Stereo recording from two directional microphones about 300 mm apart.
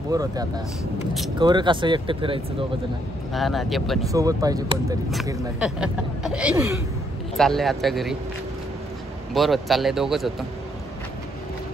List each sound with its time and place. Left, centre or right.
0.1 s speech: centre
3.3 s speech: centre
4.1 s speech: centre
9.3 s speech: centre